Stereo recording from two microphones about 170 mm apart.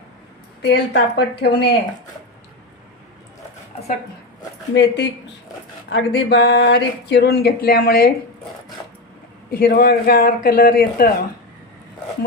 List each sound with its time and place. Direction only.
0.6 s a woman's voice: 80° left
4.7 s speech: 90° left
5.9 s speech: 80° left; by 8.1 s 60° left (ahead or behind)
9.5 s a man's voice: 65° left (ahead or behind)